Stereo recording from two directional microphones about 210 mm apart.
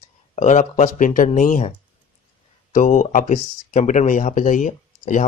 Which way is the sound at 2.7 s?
35° left (ahead or behind).